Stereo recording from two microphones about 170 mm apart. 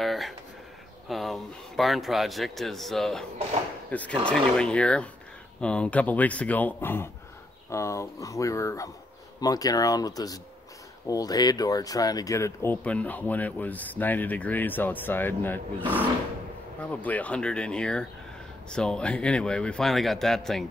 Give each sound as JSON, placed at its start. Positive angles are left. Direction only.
{"t": 0.0, "sound": "a sound", "side_deg": 0}
{"t": 1.0, "sound": "speech", "side_deg": 0}
{"t": 16.9, "sound": "speech", "side_deg": 10}